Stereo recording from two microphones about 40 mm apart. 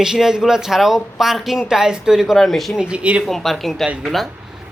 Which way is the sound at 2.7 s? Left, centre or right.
Right.